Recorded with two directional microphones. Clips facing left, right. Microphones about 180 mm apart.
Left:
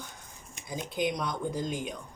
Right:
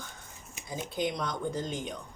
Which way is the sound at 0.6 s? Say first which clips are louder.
Even; 5° right (ahead or behind).